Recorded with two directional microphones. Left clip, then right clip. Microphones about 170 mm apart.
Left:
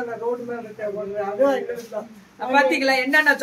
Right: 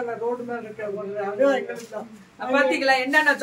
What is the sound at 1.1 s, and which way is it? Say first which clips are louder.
A woman's voice: left 1 dB; 10° left (ahead or behind).